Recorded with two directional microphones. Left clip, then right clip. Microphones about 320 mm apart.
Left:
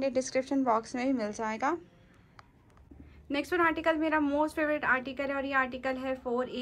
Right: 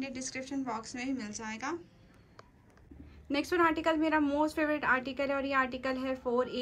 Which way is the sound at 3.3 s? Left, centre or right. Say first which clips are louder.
Even; centre.